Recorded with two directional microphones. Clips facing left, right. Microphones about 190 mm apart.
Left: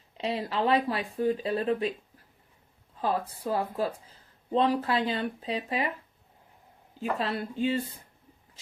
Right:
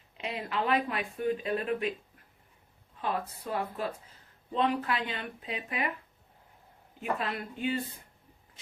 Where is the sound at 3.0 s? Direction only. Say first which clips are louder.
Left 4 dB; 35° left (ahead or behind).